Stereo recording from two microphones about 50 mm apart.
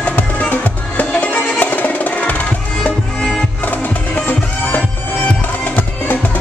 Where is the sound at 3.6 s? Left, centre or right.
Left.